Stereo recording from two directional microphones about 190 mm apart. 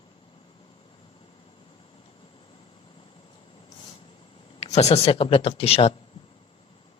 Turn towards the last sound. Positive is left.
turn(degrees=30)  # may be behind; listen again after turning